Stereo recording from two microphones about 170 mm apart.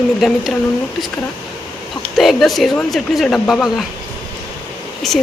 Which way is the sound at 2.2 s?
Centre (ahead or behind).